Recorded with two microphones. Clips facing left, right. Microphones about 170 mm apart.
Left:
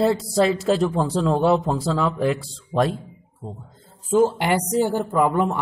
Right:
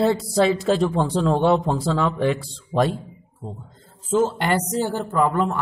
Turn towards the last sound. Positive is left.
turn(degrees=15)  # may be behind; listen again after turning